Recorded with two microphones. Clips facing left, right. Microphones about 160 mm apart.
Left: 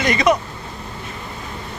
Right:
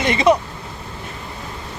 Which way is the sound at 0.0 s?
25° right (ahead or behind).